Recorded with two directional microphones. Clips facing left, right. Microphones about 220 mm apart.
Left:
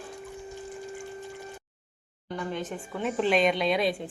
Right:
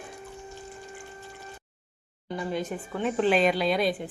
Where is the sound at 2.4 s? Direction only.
10° right (ahead or behind).